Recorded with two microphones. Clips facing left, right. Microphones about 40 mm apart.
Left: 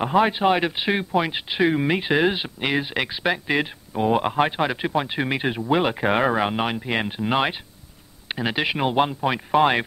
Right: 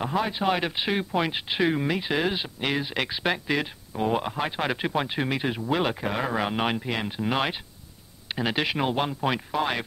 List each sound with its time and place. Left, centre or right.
0.2 s speech: left
0.7 s speech: centre
1.8 s speech: left; by 3.4 s centre
3.4 s speech: left
4.2 s speech: left
4.6 s speech: centre
5.9 s speech: left
6.5 s speech: centre
6.9 s speech: left
7.2 s speech: centre
9.5 s speech: left